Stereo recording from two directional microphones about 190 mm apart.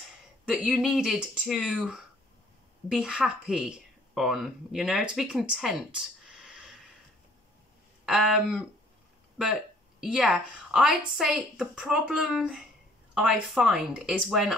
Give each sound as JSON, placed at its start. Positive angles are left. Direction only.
{"t": 0.5, "sound": "a woman's voice", "side_deg": -5}
{"t": 8.0, "sound": "a woman's voice", "side_deg": 0}